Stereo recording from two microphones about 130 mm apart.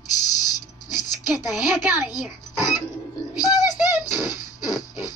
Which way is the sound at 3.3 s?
30° left (ahead or behind).